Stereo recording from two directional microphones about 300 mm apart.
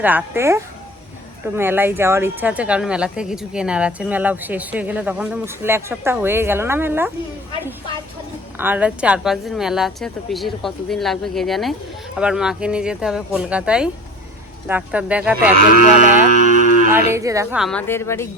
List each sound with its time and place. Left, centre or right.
0.0 s speech: centre
8.5 s speech: centre
16.5 s music: right
16.9 s speech: centre